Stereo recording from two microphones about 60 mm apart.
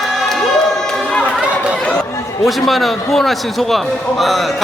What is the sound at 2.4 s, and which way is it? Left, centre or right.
A man's voice, centre.